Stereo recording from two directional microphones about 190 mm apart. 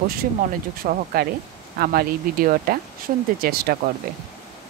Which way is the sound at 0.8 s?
45° right (ahead or behind).